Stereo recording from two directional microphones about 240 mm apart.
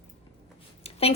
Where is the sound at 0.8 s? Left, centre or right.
Left.